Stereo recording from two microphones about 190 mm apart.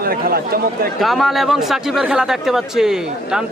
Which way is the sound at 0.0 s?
50° right (ahead or behind).